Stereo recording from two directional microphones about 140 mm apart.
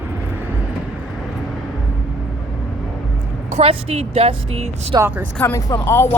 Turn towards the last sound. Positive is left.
turn(degrees=20)  # may be behind; listen again after turning